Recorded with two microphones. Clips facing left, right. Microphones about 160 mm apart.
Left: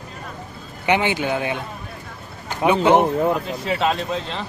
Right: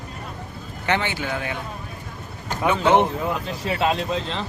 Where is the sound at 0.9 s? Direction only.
15° left (ahead or behind).